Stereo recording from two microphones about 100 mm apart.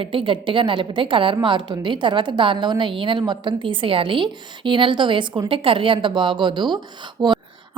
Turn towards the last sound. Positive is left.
turn(degrees=-50)  # may be behind; listen again after turning